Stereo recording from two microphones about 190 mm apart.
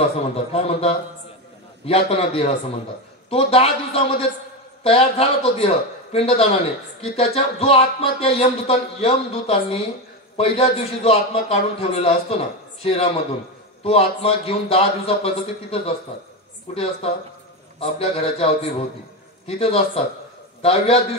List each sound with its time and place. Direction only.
0.5 s a man's voice: 30° left (ahead or behind)